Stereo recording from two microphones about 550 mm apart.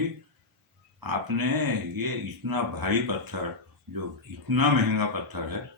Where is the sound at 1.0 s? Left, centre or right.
Right.